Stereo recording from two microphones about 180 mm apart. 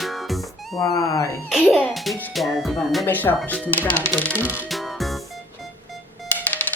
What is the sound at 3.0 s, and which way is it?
A woman's voice, 10° left (ahead or behind).